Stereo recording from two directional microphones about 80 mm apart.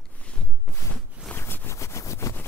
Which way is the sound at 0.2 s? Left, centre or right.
Centre.